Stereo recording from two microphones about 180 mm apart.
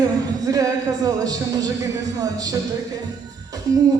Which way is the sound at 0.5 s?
20° right (ahead or behind).